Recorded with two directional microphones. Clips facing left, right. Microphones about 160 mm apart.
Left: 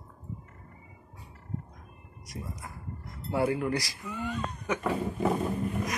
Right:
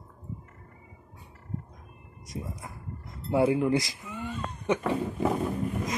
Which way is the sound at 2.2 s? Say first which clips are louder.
Right 3 dB; 25° right (ahead or behind).